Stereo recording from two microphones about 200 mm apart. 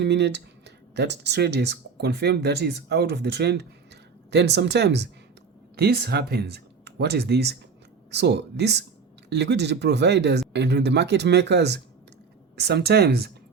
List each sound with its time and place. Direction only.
0.0 s speech: 60° right (ahead or behind)